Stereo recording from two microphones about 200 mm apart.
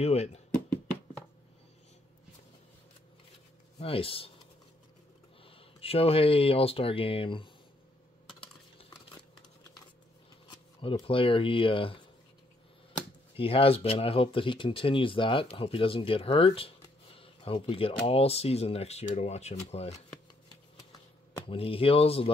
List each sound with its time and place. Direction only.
0.0 s speech: 30° left (ahead or behind)
3.8 s speech: 30° left (ahead or behind)
5.4 s speech: 25° left (ahead or behind)
10.8 s speech: 25° left (ahead or behind)
13.4 s speech: 30° left (ahead or behind)
21.5 s speech: 30° left (ahead or behind)